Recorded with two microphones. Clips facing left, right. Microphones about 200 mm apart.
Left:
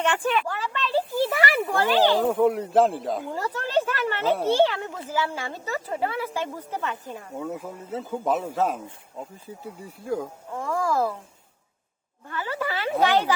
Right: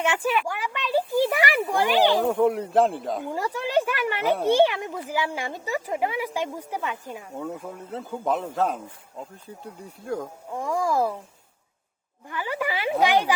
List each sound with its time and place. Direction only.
0.0 s a sound: 10° right (ahead or behind)
1.7 s speech: 15° right (ahead or behind)
2.2 s a man's voice: centre (ahead or behind)
3.3 s a sound: 10° right (ahead or behind)
4.4 s speech: 15° right (ahead or behind)
7.3 s a man's voice: centre (ahead or behind)
10.5 s speech: 15° right (ahead or behind)
12.3 s speech: 15° right (ahead or behind)